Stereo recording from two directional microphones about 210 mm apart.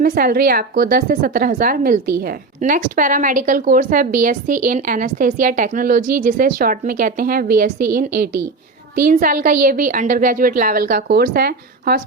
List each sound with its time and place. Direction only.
0.0 s a woman's voice: 40° right (ahead or behind)